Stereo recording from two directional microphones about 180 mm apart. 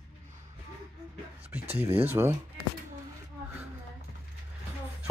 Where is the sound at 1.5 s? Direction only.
10° right (ahead or behind).